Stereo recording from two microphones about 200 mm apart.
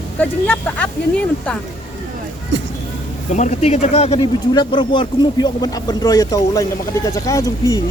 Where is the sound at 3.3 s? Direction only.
35° left (ahead or behind); by 7.8 s 15° left (ahead or behind).